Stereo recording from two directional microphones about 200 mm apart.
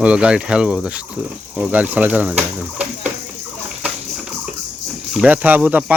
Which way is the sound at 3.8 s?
5° right (ahead or behind).